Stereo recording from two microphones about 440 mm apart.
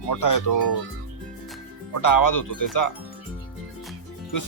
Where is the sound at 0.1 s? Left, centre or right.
Left.